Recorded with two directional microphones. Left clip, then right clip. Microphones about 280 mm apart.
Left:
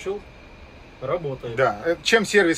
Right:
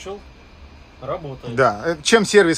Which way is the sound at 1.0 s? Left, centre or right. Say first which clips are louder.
Left 2 dB; centre.